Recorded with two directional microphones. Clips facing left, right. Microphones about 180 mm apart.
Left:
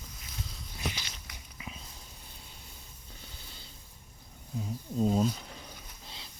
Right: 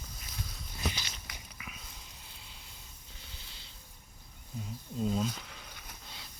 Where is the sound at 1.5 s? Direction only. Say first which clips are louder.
Left 7 dB; 30° left (ahead or behind).